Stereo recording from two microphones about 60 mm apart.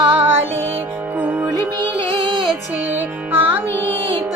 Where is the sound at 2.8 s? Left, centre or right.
Right.